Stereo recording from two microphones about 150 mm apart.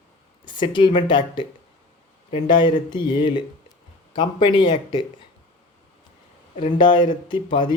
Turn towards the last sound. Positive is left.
turn(degrees=30)  # may be behind; listen again after turning